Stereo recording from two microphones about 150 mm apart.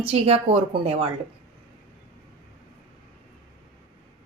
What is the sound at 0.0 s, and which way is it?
Speech, 40° right (ahead or behind).